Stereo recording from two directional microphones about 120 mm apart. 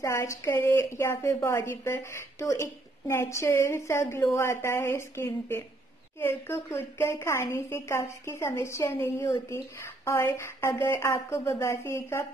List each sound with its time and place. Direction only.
0.0 s a woman's voice: 25° left (ahead or behind)